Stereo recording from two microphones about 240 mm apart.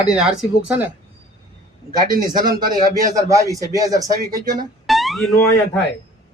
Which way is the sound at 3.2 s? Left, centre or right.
Centre.